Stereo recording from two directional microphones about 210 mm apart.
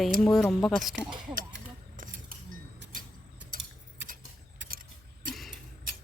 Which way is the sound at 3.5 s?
40° right (ahead or behind).